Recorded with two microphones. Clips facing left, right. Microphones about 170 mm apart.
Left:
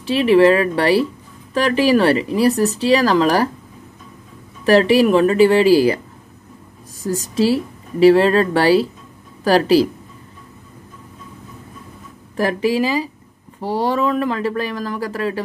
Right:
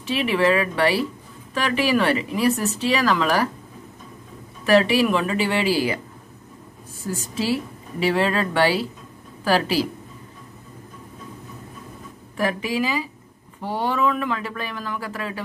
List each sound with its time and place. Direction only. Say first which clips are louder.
0.0 s speech: left 8 dB; 35° left (ahead or behind)
4.6 s speech: left 5 dB; 35° left (ahead or behind)
7.0 s speech: left 9 dB; 40° left (ahead or behind)
12.4 s speech: left 6 dB; 35° left (ahead or behind)